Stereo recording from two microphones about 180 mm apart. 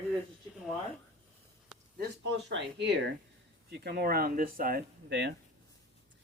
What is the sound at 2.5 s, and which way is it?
Speech, 75° right (ahead or behind).